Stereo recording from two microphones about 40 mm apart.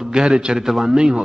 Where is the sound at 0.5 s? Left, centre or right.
Centre.